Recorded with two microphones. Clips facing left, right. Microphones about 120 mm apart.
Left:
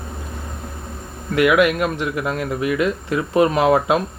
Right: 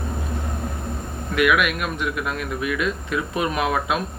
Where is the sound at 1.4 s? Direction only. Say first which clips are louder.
Left 5 dB; 25° left (ahead or behind).